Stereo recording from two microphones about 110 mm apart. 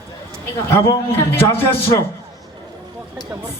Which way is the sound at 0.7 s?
25° left (ahead or behind).